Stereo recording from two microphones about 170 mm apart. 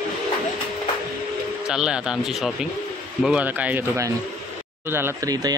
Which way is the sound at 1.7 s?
5° right (ahead or behind).